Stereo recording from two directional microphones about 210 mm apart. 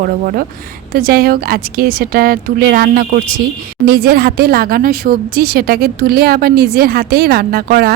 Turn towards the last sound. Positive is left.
turn(degrees=-45)  # may be behind; listen again after turning